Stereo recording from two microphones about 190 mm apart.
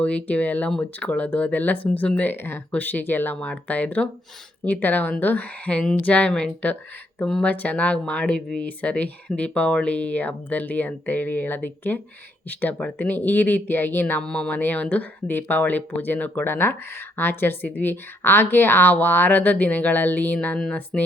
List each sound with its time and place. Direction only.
0.0 s speech: 5° left (ahead or behind)